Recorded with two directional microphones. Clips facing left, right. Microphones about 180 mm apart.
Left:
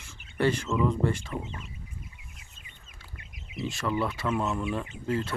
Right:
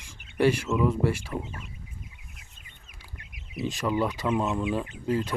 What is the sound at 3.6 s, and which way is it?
Speech, 15° right (ahead or behind).